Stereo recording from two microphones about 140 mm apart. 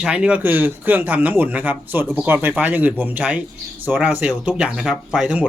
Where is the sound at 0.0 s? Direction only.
5° right (ahead or behind).